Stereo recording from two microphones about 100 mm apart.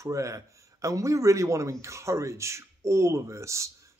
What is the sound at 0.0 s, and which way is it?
A man's voice, 30° right (ahead or behind).